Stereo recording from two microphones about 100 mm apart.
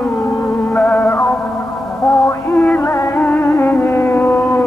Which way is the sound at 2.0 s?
Centre (ahead or behind).